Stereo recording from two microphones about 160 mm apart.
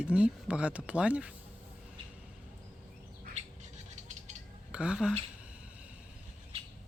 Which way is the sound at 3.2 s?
45° right (ahead or behind).